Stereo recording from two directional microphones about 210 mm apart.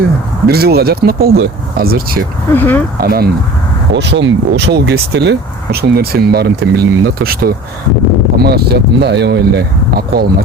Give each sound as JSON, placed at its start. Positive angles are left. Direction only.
{"t": 0.4, "sound": "speech", "side_deg": -50}
{"t": 2.6, "sound": "speech", "side_deg": 10}
{"t": 3.0, "sound": "speech", "side_deg": -45}